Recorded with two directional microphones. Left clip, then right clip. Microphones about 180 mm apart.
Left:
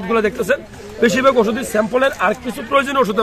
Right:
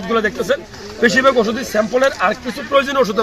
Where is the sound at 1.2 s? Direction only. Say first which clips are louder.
Even; 20° left (ahead or behind).